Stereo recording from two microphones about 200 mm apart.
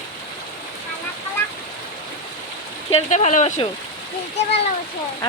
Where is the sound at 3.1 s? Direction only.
40° left (ahead or behind).